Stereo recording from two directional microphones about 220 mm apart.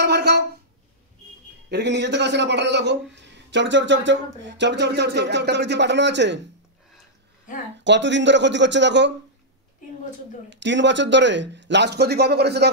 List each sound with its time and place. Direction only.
0.0 s a sound: 45° right (ahead or behind)
1.7 s speech: 50° right (ahead or behind)
7.8 s speech: 55° right (ahead or behind)
10.5 s speech: 55° right (ahead or behind)